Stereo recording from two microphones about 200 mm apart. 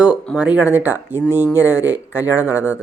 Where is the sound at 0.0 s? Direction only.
5° right (ahead or behind).